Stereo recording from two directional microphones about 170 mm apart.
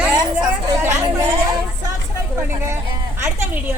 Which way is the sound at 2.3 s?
15° right (ahead or behind).